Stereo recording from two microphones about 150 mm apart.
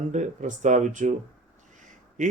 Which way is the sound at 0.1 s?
55° right (ahead or behind).